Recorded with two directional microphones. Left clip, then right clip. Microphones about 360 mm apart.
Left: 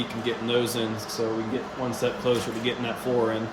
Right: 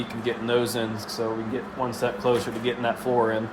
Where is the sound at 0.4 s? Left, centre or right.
Centre.